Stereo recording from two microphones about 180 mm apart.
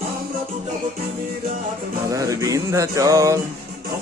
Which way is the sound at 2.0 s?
20° right (ahead or behind).